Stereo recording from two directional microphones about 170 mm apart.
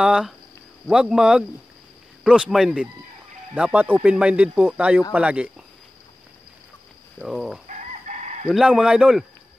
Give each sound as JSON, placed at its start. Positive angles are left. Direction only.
{"t": 0.0, "sound": "speech", "side_deg": -5}
{"t": 7.2, "sound": "speech", "side_deg": 0}
{"t": 7.6, "sound": "chicken", "side_deg": -45}
{"t": 8.5, "sound": "speech", "side_deg": 0}